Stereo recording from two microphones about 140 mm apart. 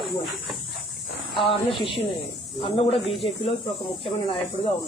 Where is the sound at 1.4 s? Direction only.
40° left (ahead or behind).